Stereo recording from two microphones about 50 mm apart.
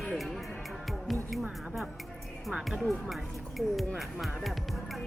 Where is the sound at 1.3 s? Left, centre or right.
Centre.